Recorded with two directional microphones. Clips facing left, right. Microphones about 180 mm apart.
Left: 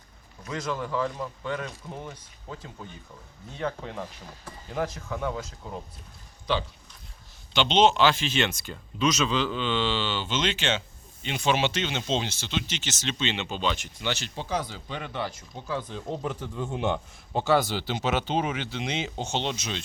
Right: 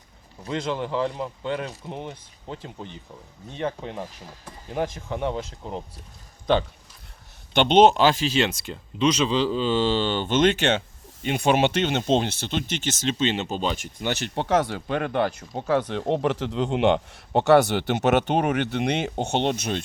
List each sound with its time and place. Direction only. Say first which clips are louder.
0.4 s speech: right 4 dB; 30° right (ahead or behind)
6.5 s speech: right 6 dB; 50° right (ahead or behind)